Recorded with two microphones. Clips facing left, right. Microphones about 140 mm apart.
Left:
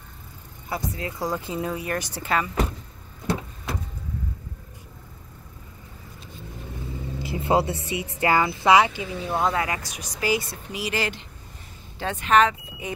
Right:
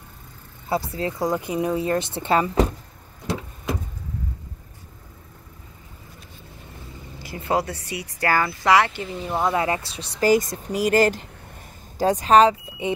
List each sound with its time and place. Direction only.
0.7 s speech: 30° right (ahead or behind)
7.2 s speech: 25° left (ahead or behind)
9.0 s speech: centre (ahead or behind)
9.5 s speech: 25° right (ahead or behind)
10.2 s speech: 45° right (ahead or behind); by 12.9 s 30° right (ahead or behind)